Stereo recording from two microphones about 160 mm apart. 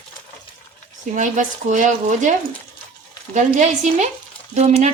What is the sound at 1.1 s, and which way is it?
Speech, 50° right (ahead or behind).